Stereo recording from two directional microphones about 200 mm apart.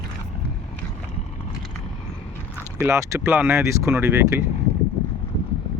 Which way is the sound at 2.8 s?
10° right (ahead or behind).